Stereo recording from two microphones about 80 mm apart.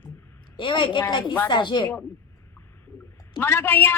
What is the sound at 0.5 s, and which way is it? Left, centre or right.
Speech, left.